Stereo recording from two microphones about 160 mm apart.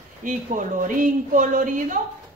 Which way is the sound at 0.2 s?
55° right (ahead or behind).